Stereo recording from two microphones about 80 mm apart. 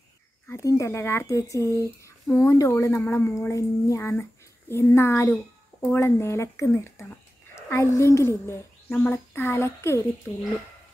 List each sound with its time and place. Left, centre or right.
0.5 s speech: left